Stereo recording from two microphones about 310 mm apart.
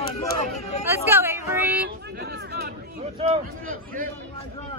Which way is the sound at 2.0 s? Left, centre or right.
Right.